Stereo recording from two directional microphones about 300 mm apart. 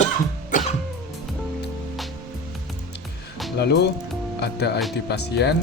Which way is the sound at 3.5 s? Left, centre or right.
Left.